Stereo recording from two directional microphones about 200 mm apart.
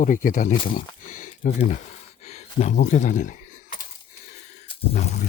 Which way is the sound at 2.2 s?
35° left (ahead or behind).